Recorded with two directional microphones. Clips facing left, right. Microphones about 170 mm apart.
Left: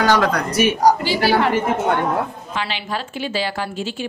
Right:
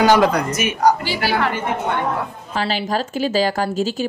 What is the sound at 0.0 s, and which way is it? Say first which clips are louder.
Speech: right 3 dB; 10° right (ahead or behind).